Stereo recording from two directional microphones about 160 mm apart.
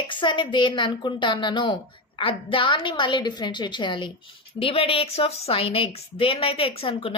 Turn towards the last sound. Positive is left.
turn(degrees=35)  # may be behind; listen again after turning